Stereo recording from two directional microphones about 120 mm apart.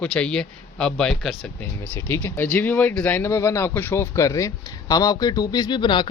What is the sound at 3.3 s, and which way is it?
A man's voice, 25° left (ahead or behind).